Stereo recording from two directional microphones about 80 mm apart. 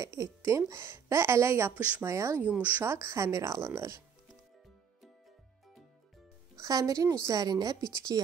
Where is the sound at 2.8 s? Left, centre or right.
Right.